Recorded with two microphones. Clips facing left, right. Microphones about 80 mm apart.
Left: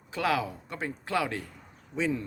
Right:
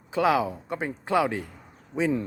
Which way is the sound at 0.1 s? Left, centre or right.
Right.